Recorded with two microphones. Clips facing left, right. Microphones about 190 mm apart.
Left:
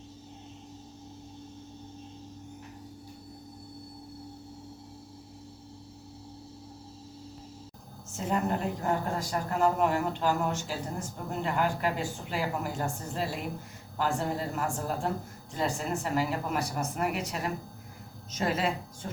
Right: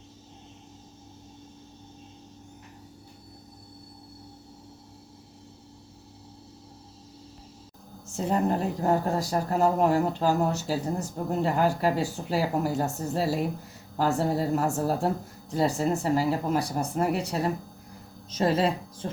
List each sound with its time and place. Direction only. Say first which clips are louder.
8.1 s speech: right 4 dB; 35° right (ahead or behind)